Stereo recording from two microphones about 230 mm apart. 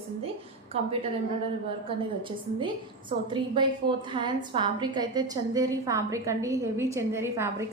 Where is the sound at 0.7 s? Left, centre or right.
Right.